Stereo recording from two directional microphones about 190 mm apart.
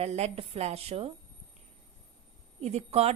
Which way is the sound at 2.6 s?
35° right (ahead or behind).